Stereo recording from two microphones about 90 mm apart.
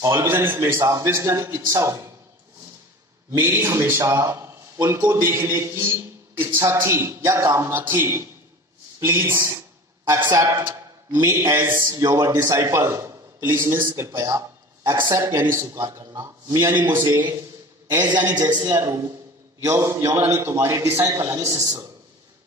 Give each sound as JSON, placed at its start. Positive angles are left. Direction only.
{"t": 0.0, "sound": "a man's voice", "side_deg": -30}
{"t": 3.3, "sound": "a man's voice", "side_deg": -25}
{"t": 16.5, "sound": "a man's voice", "side_deg": -25}
{"t": 18.0, "sound": "a man's voice", "side_deg": -50}
{"t": 18.8, "sound": "a man's voice", "side_deg": -30}